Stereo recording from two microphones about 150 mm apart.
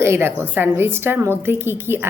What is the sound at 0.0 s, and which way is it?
A woman's voice, 15° right (ahead or behind).